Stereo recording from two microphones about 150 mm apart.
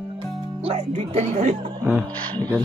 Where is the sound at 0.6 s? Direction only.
45° right (ahead or behind).